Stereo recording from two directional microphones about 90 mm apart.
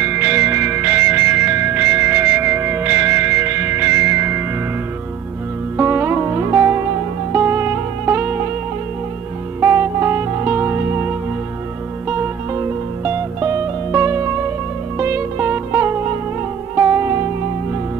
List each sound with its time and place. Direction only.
0.0 s music: 25° right (ahead or behind)
5.8 s music: 25° right (ahead or behind)
9.6 s music: 25° right (ahead or behind)
12.1 s music: 25° right (ahead or behind)